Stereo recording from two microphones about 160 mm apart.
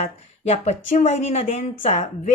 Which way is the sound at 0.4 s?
45° left (ahead or behind).